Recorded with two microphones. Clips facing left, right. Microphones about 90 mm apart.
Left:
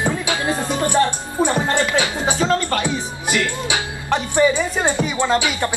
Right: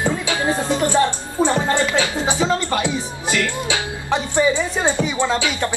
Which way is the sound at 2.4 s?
10° right (ahead or behind).